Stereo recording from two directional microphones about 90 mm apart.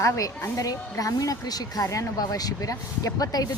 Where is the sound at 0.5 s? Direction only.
40° left (ahead or behind).